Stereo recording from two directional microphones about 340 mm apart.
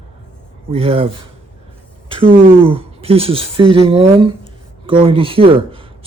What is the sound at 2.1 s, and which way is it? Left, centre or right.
A woman's voice, centre.